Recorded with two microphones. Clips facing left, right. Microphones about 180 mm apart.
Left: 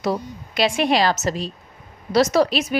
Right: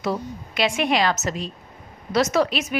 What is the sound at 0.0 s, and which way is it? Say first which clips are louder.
A woman's voice: left 2 dB; 35° left (ahead or behind).